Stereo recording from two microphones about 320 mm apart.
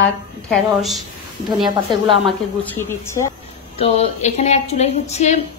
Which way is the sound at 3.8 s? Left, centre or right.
Centre.